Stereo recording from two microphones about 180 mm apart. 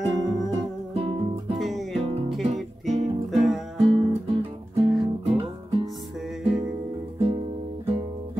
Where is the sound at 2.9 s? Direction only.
35° right (ahead or behind).